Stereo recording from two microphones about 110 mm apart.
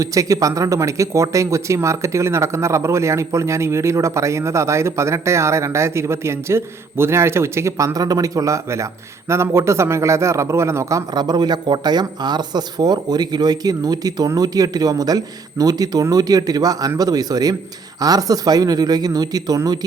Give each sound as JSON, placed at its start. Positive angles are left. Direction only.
{"t": 0.0, "sound": "a man's voice", "side_deg": -30}